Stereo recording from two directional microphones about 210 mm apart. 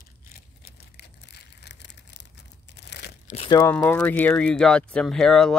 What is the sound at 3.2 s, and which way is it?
Crumpling, 30° left (ahead or behind).